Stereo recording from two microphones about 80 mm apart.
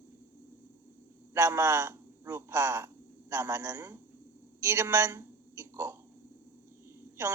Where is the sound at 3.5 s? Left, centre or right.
Right.